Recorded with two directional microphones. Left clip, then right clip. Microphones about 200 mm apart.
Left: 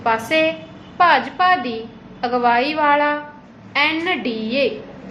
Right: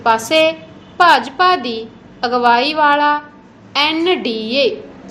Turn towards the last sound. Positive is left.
turn(degrees=-25)  # may be behind; listen again after turning